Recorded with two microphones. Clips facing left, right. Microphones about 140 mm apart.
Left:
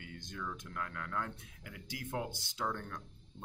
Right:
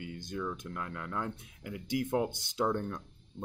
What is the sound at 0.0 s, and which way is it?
Speech, 15° right (ahead or behind).